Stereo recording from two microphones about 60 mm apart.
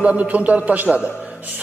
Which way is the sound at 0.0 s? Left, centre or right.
Right.